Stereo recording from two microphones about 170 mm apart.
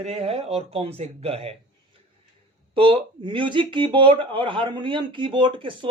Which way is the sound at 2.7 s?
30° right (ahead or behind).